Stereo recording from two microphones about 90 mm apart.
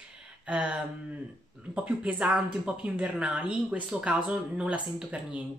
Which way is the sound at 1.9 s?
15° right (ahead or behind).